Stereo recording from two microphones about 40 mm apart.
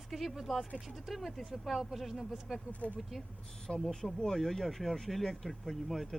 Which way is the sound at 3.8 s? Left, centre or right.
Centre.